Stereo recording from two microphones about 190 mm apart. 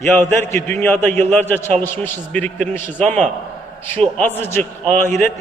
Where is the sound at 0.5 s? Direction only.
10° left (ahead or behind).